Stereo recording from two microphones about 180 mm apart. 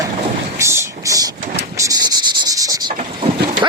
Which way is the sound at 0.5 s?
15° right (ahead or behind).